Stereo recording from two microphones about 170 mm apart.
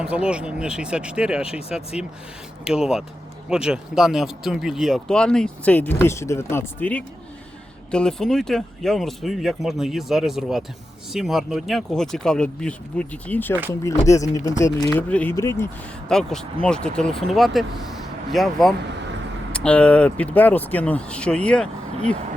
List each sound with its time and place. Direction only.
0.0 s speech: 5° right (ahead or behind); by 15.7 s 15° left (ahead or behind)
16.0 s speech: 5° left (ahead or behind)